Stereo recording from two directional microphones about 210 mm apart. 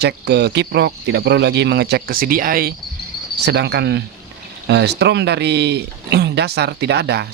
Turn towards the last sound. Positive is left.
turn(degrees=-55)  # may be behind; listen again after turning